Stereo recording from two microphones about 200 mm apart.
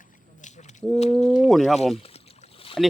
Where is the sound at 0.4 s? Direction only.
35° left (ahead or behind).